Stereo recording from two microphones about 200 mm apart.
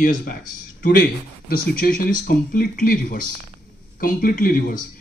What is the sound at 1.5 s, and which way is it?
Speech, 45° left (ahead or behind).